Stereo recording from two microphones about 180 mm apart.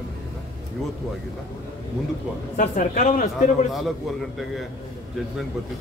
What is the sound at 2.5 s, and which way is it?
A man's voice, 45° left (ahead or behind).